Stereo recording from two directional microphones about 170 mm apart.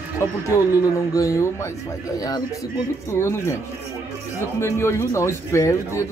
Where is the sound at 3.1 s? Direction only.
15° left (ahead or behind).